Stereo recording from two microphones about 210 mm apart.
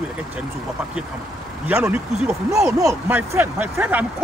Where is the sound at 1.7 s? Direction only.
5° right (ahead or behind).